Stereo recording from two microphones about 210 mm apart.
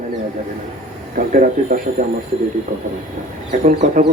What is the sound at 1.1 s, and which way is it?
Speech, 40° right (ahead or behind).